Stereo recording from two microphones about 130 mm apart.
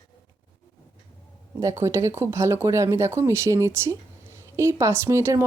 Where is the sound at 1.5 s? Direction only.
20° right (ahead or behind).